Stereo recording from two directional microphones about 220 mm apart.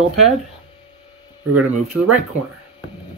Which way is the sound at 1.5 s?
90° right.